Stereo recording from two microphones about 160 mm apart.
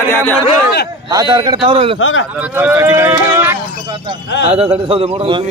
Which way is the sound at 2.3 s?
10° right (ahead or behind).